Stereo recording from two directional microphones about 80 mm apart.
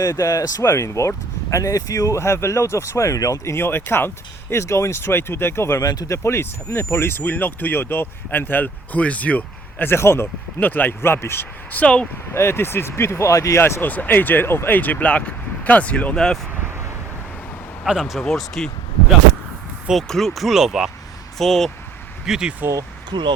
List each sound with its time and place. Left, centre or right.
0.1 s speech: left
0.6 s speech: left
5.8 s speech: left
6.1 s speech: left; by 12.0 s centre
12.3 s speech: left
13.8 s speech: left
18.0 s speech: centre
19.9 s speech: centre
22.3 s speech: centre
23.0 s speech: right